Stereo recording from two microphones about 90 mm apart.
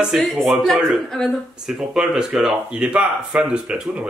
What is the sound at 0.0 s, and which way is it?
Speech, centre (ahead or behind).